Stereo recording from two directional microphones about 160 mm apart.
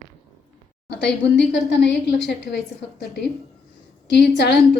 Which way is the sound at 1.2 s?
90° left.